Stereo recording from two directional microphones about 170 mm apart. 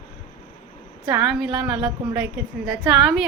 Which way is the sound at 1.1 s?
5° right (ahead or behind).